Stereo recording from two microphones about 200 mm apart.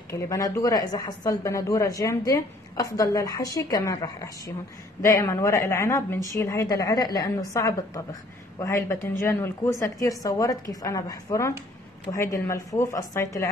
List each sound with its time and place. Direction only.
0.1 s speech: 15° left (ahead or behind)